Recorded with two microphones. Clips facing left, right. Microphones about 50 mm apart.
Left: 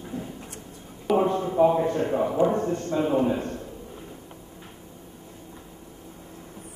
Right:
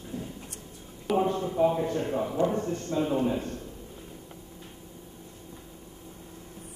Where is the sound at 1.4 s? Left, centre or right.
Left.